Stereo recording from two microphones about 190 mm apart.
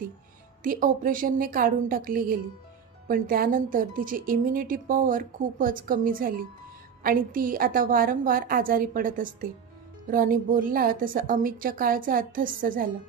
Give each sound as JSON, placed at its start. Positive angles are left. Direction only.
{"t": 0.7, "sound": "speech", "side_deg": -45}